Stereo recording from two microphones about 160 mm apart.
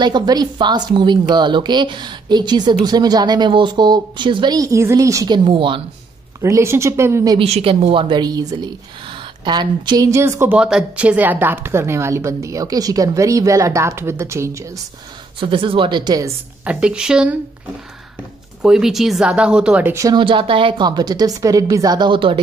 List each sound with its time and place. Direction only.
0.0 s a woman's voice: 25° right (ahead or behind)
6.4 s speech: 15° right (ahead or behind)
7.3 s a woman's voice: 40° right (ahead or behind); by 14.6 s 15° right (ahead or behind)
15.4 s a woman's voice: 30° right (ahead or behind)
16.6 s speech: 5° right (ahead or behind)
18.6 s speech: 5° right (ahead or behind)
20.2 s a woman's voice: 30° right (ahead or behind)